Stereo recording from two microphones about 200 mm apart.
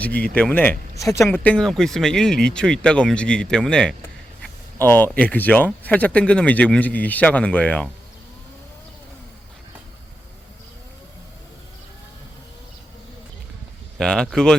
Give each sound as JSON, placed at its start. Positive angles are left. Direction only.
{"t": 0.0, "sound": "speech", "side_deg": 5}
{"t": 14.0, "sound": "speech", "side_deg": 5}